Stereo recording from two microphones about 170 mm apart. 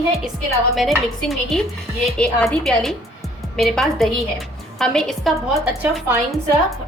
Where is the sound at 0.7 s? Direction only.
Centre (ahead or behind).